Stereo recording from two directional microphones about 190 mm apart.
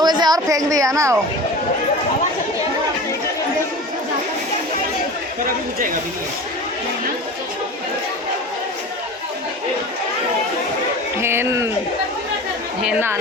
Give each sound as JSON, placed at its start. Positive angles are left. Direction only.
{"t": 0.0, "sound": "speech", "side_deg": -20}
{"t": 11.2, "sound": "a sound", "side_deg": -15}
{"t": 12.8, "sound": "speech", "side_deg": -10}